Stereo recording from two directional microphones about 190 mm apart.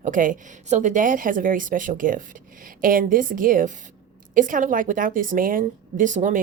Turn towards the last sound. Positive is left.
turn(degrees=-40)  # may be behind; listen again after turning